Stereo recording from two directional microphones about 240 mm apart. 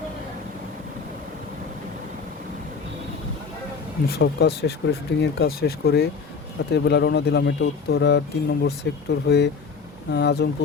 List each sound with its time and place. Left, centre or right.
4.1 s speech: left